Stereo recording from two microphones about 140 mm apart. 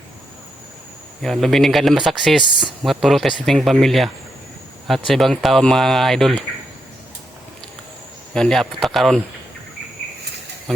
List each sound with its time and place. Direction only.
1.2 s speech: centre (ahead or behind)
8.3 s speech: 5° left (ahead or behind)